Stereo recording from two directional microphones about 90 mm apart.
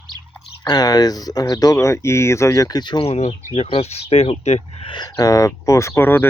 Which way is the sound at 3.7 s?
90° left.